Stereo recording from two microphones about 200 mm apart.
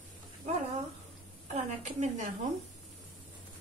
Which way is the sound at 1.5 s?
35° right (ahead or behind).